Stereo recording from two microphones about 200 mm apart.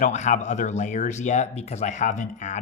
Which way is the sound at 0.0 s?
35° left (ahead or behind).